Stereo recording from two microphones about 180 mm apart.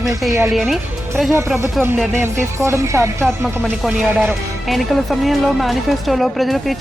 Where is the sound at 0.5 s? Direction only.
Centre (ahead or behind).